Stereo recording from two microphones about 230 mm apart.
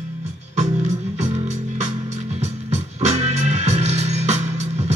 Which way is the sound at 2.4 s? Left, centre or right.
Right.